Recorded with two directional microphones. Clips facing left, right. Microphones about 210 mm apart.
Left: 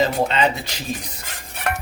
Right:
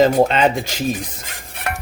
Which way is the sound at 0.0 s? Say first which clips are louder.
Right 6 dB; 50° right (ahead or behind).